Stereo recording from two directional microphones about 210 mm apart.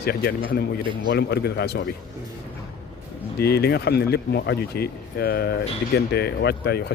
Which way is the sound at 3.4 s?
50° left (ahead or behind).